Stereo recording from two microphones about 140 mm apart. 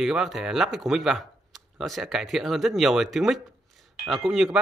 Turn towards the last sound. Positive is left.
turn(degrees=0)  # may be behind; listen again after turning